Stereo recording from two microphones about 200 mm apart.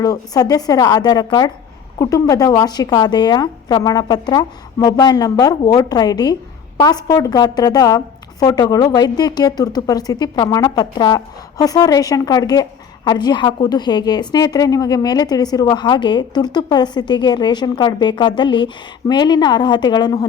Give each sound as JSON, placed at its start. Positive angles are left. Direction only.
{"t": 0.0, "sound": "a woman's voice", "side_deg": 20}